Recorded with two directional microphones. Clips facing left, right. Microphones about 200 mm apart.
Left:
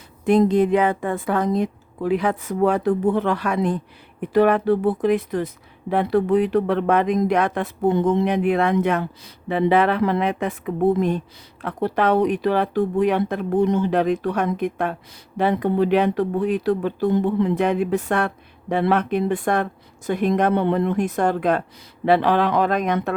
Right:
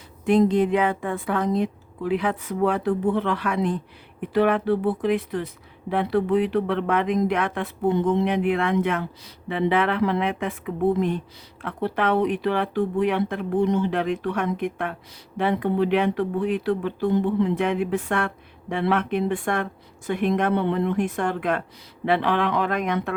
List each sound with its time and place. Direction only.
0.3 s a woman's voice: 45° left (ahead or behind)
11.6 s speech: 40° left (ahead or behind)